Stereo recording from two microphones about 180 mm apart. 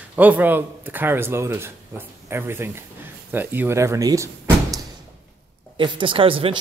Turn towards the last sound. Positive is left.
turn(degrees=-30)  # may be behind; listen again after turning